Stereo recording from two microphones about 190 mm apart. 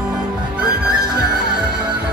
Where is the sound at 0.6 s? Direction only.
5° right (ahead or behind).